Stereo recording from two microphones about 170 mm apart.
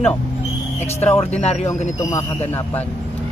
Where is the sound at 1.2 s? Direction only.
40° left (ahead or behind).